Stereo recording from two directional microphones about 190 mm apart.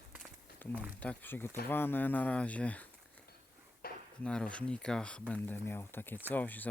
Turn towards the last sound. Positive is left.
turn(degrees=10)  # may be behind; listen again after turning